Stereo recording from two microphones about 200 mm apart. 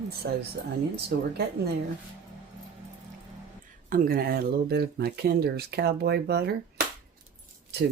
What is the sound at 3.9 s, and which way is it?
Speech, 45° right (ahead or behind).